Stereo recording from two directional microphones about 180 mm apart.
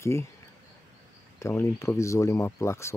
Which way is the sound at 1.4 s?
15° left (ahead or behind).